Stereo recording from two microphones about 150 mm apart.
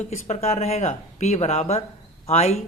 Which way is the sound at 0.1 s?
45° left (ahead or behind).